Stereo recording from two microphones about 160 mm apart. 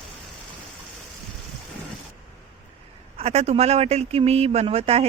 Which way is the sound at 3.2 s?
40° right (ahead or behind).